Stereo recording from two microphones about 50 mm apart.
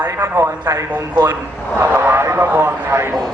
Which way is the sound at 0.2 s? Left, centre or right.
Right.